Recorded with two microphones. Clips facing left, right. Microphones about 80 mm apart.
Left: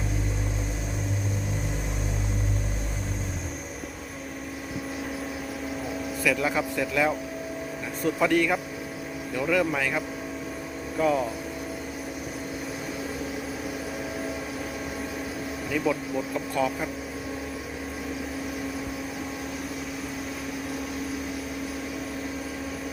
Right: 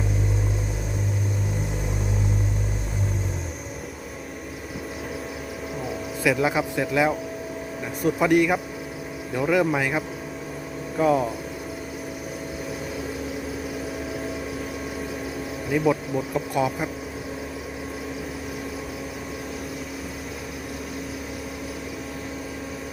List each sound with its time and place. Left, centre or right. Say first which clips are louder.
6.2 s speech: right 4 dB; centre
15.9 s speech: right 4 dB; centre